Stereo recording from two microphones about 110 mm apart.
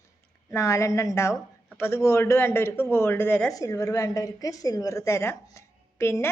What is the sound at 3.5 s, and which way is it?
A woman's voice, 30° left (ahead or behind).